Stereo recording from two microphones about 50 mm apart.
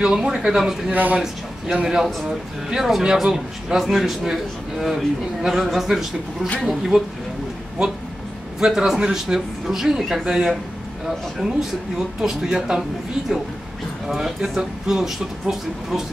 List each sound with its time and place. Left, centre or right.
0.0 s a man's voice: centre
0.9 s a man's voice: right
1.8 s a man's voice: centre
8.5 s a man's voice: centre
14.0 s a man's voice: centre